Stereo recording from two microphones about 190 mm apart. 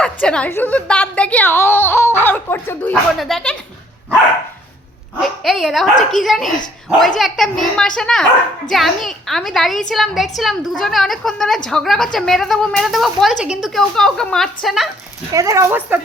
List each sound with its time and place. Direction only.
0.0 s a woman's voice: 5° left (ahead or behind)
5.1 s a woman's voice: centre (ahead or behind)
15.3 s speech: 15° right (ahead or behind)